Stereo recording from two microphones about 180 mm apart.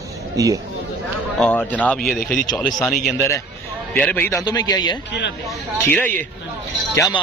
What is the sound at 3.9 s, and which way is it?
Speech, 10° left (ahead or behind).